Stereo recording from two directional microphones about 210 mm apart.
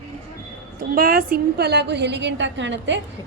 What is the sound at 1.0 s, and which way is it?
A woman's voice, 45° right (ahead or behind).